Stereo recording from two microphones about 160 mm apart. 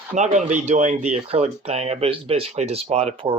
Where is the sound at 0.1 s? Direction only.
45° right (ahead or behind).